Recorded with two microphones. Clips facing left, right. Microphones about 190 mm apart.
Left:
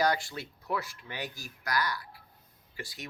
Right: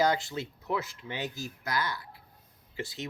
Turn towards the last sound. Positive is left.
turn(degrees=-25)  # may be behind; listen again after turning